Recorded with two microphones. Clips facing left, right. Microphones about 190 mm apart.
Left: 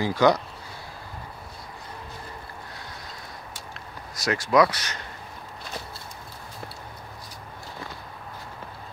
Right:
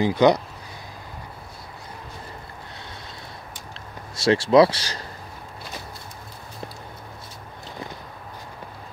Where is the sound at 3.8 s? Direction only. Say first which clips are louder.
Right 2 dB; 30° right (ahead or behind).